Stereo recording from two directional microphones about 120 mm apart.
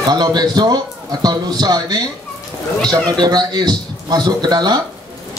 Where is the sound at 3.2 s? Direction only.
35° right (ahead or behind).